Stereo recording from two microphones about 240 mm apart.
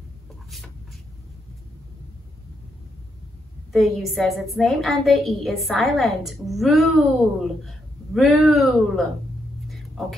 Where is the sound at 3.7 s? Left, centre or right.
Centre.